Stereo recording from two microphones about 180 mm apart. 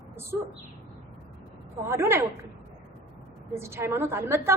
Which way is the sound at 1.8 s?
15° right (ahead or behind).